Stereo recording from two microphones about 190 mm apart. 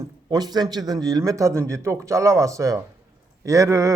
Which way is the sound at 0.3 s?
20° right (ahead or behind).